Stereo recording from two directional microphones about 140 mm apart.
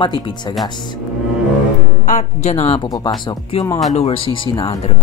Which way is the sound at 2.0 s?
55° left (ahead or behind).